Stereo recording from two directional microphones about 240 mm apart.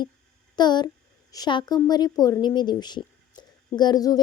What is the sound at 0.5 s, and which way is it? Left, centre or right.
A woman's voice, centre.